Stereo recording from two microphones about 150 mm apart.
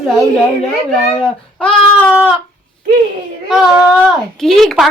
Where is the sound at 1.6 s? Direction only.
10° left (ahead or behind).